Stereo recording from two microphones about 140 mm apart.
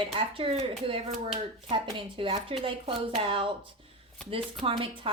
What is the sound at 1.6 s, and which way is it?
A woman's voice, 40° right (ahead or behind).